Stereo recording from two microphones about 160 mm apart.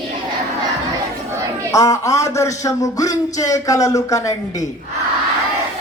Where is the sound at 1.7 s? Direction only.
20° left (ahead or behind).